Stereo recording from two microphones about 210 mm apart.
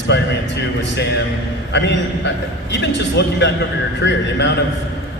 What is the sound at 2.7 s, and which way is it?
A man's voice, 55° left (ahead or behind).